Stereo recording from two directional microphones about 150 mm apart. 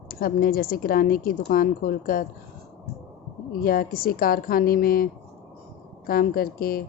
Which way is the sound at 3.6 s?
75° left (ahead or behind).